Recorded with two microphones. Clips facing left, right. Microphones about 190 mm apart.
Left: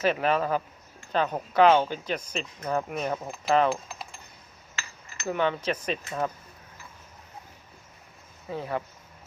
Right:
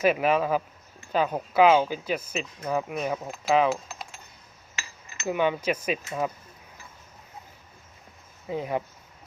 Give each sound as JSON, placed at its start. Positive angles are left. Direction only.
{"t": 0.0, "sound": "speech", "side_deg": -10}
{"t": 4.7, "sound": "cutlery", "side_deg": -20}
{"t": 5.2, "sound": "speech", "side_deg": -10}
{"t": 8.4, "sound": "speech", "side_deg": -15}